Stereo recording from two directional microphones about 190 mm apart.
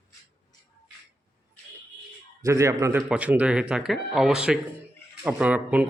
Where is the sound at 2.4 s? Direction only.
15° right (ahead or behind).